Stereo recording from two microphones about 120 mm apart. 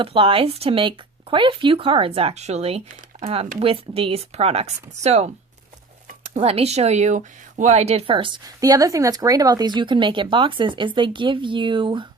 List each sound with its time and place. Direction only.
0.0 s speech: 45° right (ahead or behind)
8.1 s speech: 45° right (ahead or behind)
8.4 s speech: 30° right (ahead or behind)